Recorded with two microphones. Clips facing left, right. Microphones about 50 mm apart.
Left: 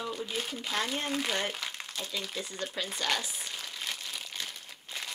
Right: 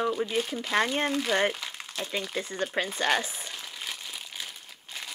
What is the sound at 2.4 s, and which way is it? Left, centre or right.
Speech, right.